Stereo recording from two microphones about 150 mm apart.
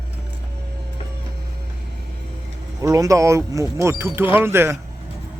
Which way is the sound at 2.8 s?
20° right (ahead or behind).